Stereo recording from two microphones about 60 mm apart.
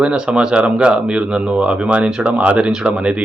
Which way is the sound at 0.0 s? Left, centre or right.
Centre.